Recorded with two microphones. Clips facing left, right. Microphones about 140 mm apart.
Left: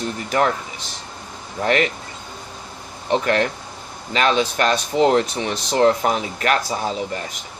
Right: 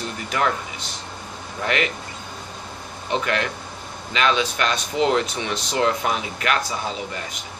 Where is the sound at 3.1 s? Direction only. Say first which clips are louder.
Left 5 dB; 40° left (ahead or behind).